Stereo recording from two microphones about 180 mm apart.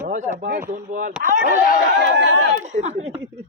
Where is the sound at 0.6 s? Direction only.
50° right (ahead or behind).